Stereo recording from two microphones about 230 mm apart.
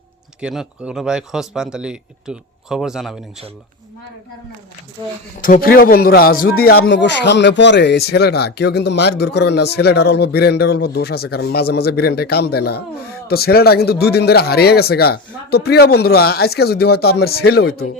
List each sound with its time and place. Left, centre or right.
0.4 s a man's voice: centre
5.5 s a man's voice: left